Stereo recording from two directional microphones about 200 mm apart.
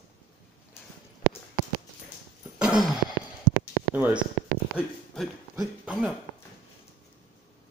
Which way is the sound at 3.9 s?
10° right (ahead or behind).